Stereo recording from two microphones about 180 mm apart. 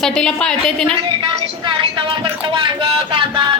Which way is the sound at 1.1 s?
30° right (ahead or behind).